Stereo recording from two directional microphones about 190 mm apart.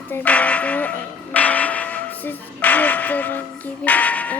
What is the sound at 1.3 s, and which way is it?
Music, 10° left (ahead or behind).